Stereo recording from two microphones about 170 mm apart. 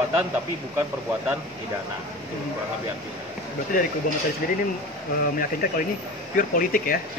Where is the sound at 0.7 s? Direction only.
10° right (ahead or behind).